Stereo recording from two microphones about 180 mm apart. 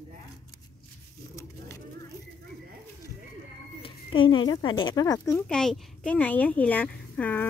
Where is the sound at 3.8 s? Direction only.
30° left (ahead or behind).